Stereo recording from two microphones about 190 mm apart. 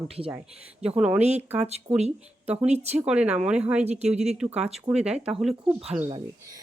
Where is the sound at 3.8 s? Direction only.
35° right (ahead or behind).